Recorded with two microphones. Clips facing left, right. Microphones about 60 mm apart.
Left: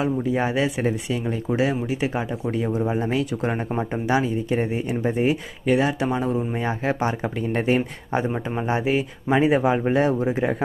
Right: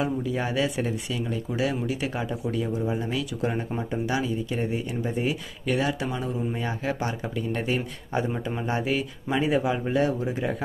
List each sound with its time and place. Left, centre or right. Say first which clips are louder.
0.2 s speech: left 4 dB; left
2.5 s speech: left 5 dB; left